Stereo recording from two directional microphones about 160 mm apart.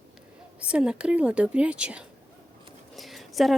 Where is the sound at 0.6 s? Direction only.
5° right (ahead or behind).